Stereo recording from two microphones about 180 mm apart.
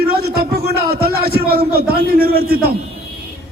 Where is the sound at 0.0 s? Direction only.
60° right (ahead or behind).